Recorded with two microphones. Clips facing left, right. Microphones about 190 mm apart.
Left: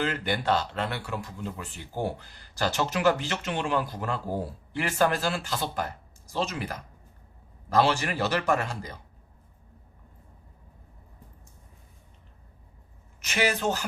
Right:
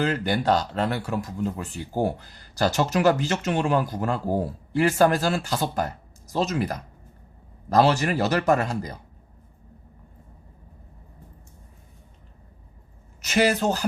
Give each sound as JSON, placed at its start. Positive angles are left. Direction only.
{"t": 0.0, "sound": "speech", "side_deg": -40}
{"t": 13.2, "sound": "speech", "side_deg": -40}